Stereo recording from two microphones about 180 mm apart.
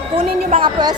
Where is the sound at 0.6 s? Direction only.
25° right (ahead or behind).